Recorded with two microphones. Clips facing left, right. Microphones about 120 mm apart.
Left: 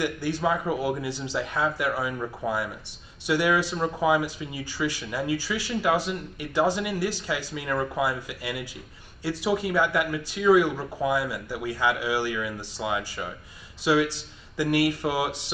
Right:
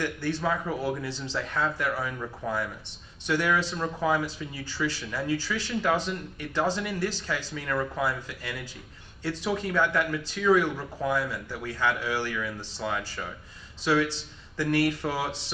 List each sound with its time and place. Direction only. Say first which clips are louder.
0.0 s speech: left 3 dB; 10° left (ahead or behind)